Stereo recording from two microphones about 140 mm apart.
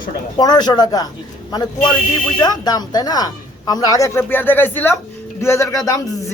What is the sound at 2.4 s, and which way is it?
Speech, 30° left (ahead or behind).